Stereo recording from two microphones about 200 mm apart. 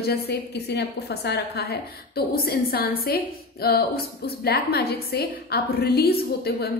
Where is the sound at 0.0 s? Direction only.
50° left (ahead or behind).